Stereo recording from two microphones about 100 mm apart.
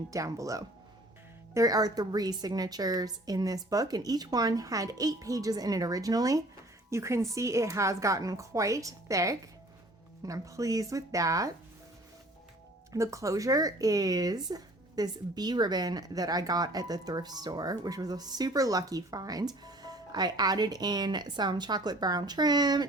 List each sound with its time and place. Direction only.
0.1 s a woman's voice: 35° right (ahead or behind)
12.9 s a woman's voice: 30° right (ahead or behind)